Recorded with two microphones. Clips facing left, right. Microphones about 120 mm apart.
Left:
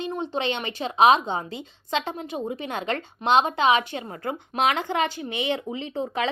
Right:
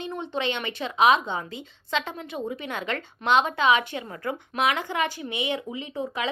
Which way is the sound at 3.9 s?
35° left (ahead or behind).